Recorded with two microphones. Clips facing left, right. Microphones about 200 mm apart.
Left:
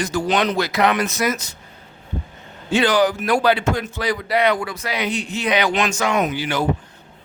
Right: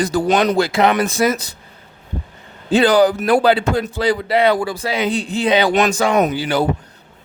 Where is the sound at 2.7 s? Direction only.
35° right (ahead or behind).